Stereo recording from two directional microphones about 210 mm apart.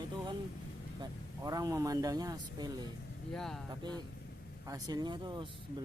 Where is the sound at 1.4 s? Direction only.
15° right (ahead or behind).